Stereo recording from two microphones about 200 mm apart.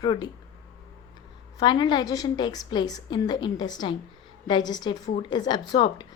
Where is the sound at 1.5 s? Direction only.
20° left (ahead or behind).